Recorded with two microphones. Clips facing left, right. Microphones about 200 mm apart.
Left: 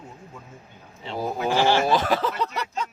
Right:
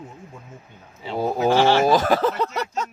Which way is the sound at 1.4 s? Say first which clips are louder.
Right 4 dB; 40° right (ahead or behind).